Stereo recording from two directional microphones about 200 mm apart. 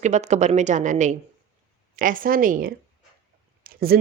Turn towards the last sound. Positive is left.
turn(degrees=-50)  # may be behind; listen again after turning